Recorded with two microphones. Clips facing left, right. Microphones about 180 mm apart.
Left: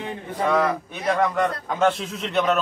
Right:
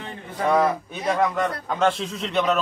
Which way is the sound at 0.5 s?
10° right (ahead or behind).